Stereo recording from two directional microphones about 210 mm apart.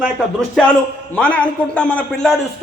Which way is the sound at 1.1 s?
5° left (ahead or behind).